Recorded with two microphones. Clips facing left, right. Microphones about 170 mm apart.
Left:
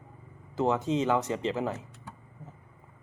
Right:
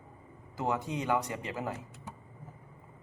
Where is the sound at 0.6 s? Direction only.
20° left (ahead or behind).